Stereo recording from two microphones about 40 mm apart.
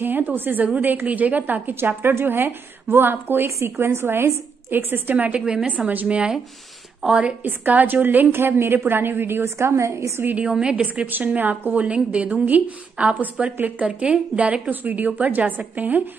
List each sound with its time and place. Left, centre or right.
0.0 s a woman's voice: right
1.8 s a woman's voice: right
5.1 s a woman's voice: right
6.0 s a woman's voice: right
7.4 s a woman's voice: right
8.4 s a woman's voice: right
10.5 s a woman's voice: right
11.1 s a woman's voice: right
11.8 s a woman's voice: right